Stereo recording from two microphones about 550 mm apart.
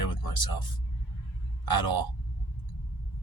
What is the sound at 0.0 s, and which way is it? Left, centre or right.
Music, left.